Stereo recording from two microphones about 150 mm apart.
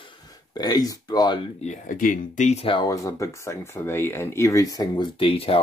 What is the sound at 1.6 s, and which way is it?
Speech, 55° left (ahead or behind).